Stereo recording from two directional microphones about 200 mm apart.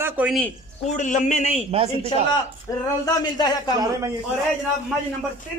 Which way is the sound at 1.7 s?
30° right (ahead or behind).